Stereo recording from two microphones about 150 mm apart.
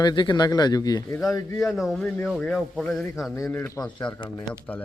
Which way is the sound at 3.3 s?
15° left (ahead or behind).